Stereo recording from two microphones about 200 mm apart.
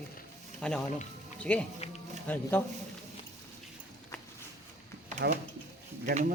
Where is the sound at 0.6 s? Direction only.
5° left (ahead or behind).